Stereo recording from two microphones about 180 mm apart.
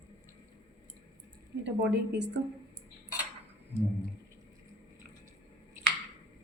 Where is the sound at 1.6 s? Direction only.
75° right (ahead or behind).